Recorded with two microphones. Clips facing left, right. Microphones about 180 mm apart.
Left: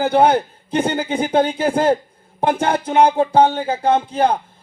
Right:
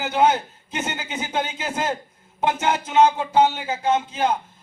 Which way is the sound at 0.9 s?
55° left (ahead or behind).